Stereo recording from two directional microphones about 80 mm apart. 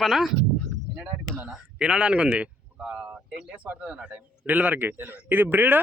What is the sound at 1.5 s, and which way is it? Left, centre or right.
Speech, centre.